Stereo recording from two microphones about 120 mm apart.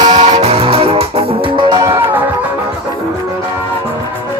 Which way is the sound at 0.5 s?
55° right (ahead or behind).